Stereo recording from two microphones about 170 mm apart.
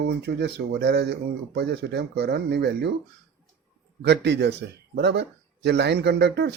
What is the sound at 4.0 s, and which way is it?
Speech, 85° right.